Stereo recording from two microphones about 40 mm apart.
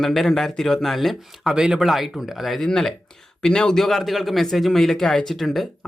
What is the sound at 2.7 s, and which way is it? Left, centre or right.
Speech, centre.